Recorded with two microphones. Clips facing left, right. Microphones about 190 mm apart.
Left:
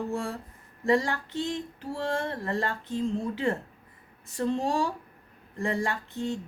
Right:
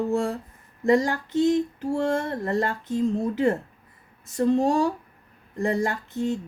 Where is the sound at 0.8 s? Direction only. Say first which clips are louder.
Right 4 dB; 40° right (ahead or behind).